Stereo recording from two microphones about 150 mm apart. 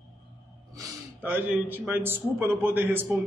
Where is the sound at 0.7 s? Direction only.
25° right (ahead or behind).